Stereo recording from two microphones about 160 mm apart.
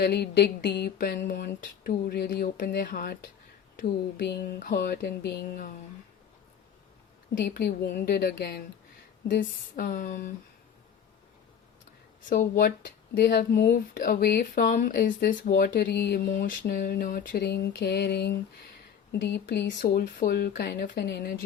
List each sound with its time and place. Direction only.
0.0 s speech: 90° left; by 3.2 s 65° left (ahead or behind)
4.2 s music: 80° left
7.4 s a sound: 90° left
8.1 s music: 90° left
9.2 s speech: 75° left (ahead or behind); by 10.3 s 55° left (ahead or behind)
12.3 s speech: 70° left (ahead or behind)
13.1 s speech: 80° left
16.6 s a sound: 80° left
19.1 s music: 90° left
20.6 s a sound: 90° left